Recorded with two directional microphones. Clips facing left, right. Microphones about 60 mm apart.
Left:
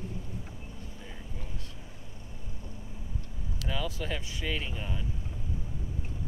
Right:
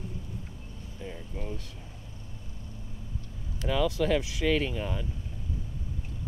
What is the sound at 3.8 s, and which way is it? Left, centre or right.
Speech, right.